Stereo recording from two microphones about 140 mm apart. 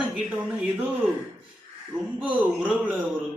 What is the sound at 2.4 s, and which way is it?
Speech, 10° right (ahead or behind).